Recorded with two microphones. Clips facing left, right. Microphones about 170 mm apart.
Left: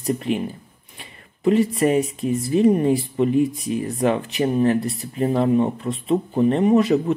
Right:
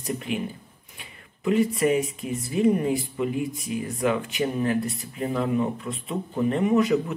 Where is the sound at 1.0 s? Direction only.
35° left (ahead or behind).